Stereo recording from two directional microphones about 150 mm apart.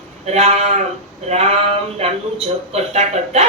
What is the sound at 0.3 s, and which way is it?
A woman's voice, 45° right (ahead or behind).